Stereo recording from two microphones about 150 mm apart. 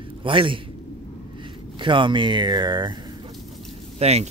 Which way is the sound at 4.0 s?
45° right (ahead or behind).